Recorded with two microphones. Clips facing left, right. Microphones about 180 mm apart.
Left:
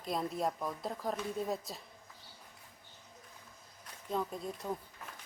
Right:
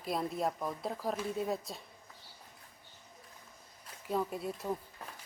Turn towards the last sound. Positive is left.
turn(degrees=-5)  # may be behind; listen again after turning